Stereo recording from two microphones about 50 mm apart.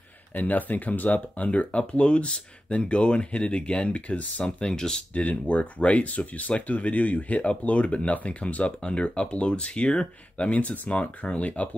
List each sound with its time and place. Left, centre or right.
0.3 s speech: left; by 5.0 s centre
5.1 s speech: left